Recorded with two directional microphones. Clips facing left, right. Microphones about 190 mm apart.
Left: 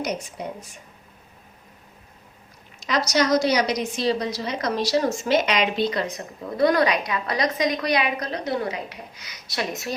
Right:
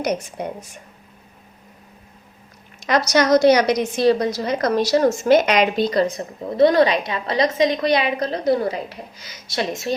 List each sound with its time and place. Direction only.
2.8 s a woman's voice: 55° right (ahead or behind); by 6.2 s 40° right (ahead or behind)
6.6 s a woman's voice: 25° right (ahead or behind)